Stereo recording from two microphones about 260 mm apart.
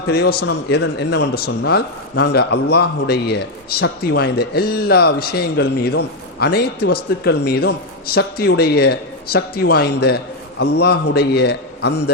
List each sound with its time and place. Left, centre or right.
0.1 s a man's voice: left